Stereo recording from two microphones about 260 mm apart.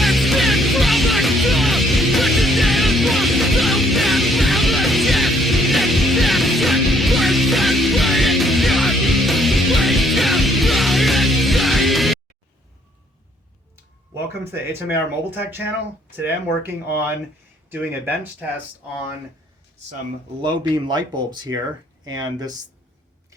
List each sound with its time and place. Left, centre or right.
0.0 s music: centre
14.7 s speech: centre
20.4 s speech: centre